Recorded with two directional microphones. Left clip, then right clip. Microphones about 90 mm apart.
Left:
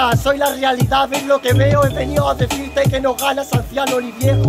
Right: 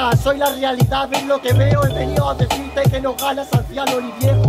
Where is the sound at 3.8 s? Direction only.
15° right (ahead or behind).